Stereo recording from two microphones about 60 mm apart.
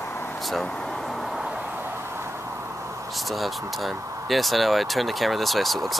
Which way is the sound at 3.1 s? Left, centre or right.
Centre.